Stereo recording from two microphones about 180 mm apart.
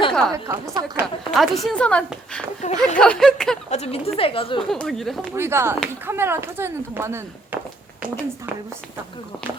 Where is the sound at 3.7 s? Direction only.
35° left (ahead or behind).